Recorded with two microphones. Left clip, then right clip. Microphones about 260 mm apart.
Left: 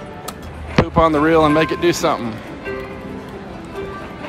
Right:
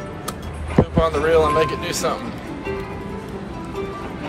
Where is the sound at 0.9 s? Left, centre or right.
Left.